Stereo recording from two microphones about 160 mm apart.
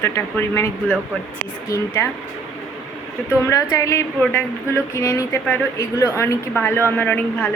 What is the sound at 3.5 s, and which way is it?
Speech, 20° left (ahead or behind).